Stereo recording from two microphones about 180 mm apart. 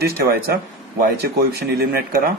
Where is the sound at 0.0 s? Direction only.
60° right (ahead or behind).